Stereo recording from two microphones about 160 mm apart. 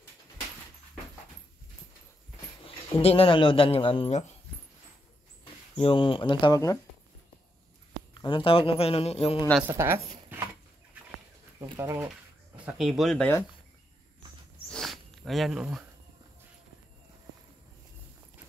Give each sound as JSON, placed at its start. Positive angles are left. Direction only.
{"t": 3.0, "sound": "speech", "side_deg": 40}
{"t": 5.8, "sound": "speech", "side_deg": 35}
{"t": 8.2, "sound": "speech", "side_deg": 30}
{"t": 9.6, "sound": "speech", "side_deg": -15}
{"t": 11.8, "sound": "speech", "side_deg": -15}
{"t": 12.6, "sound": "speech", "side_deg": 0}
{"t": 14.7, "sound": "a sound", "side_deg": 0}